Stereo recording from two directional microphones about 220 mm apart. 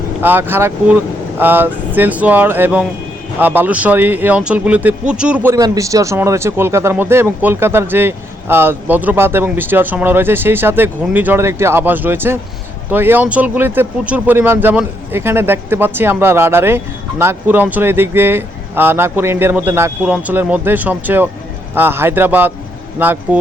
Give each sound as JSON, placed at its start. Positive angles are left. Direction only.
{"t": 0.2, "sound": "speech", "side_deg": -10}